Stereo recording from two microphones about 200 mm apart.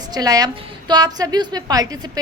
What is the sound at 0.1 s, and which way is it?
A woman's voice, 20° right (ahead or behind).